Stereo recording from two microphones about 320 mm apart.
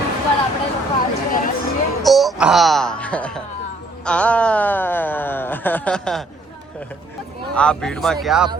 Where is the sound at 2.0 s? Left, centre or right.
Centre.